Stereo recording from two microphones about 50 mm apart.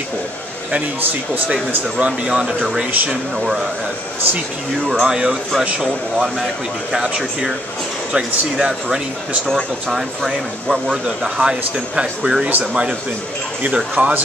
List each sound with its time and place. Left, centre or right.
2.0 s speech: right
2.4 s speech: centre
5.0 s speech: centre
6.9 s speech: centre
13.7 s speech: right